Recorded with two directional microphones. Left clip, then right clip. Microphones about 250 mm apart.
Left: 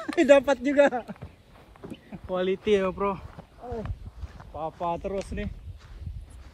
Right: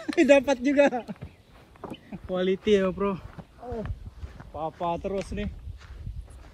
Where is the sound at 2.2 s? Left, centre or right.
Left.